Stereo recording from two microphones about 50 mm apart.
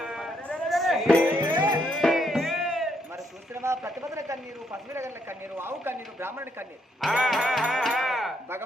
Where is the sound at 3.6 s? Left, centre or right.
Right.